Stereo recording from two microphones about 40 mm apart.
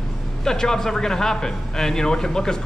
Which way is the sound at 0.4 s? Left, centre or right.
Centre.